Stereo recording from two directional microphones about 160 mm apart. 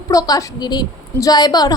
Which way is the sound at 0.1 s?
20° left (ahead or behind).